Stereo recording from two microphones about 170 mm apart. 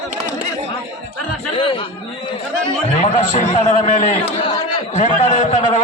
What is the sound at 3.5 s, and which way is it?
A man's voice, 40° left (ahead or behind).